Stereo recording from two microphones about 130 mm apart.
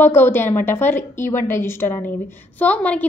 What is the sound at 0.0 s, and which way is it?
A woman's voice, 15° left (ahead or behind).